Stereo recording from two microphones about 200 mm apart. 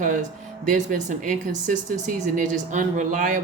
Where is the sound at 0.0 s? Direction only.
40° right (ahead or behind).